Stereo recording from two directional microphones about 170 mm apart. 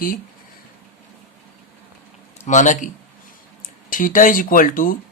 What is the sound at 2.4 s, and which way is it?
Speech, 45° left (ahead or behind).